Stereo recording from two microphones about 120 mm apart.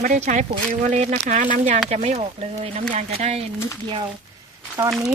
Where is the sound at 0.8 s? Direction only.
70° right (ahead or behind).